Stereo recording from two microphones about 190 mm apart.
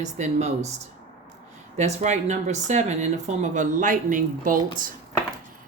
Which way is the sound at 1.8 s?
40° right (ahead or behind).